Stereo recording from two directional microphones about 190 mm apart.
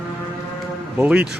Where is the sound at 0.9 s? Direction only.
10° right (ahead or behind).